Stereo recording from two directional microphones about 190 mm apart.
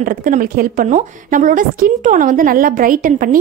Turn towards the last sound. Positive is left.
turn(degrees=-45)  # may be behind; listen again after turning